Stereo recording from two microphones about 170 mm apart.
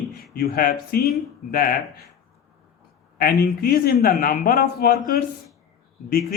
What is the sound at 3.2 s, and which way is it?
A man's voice, 65° left (ahead or behind).